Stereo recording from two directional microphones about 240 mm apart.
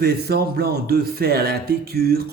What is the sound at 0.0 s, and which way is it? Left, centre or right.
Speech, right.